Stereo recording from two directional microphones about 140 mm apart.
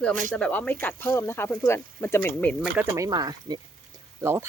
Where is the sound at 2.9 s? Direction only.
25° right (ahead or behind).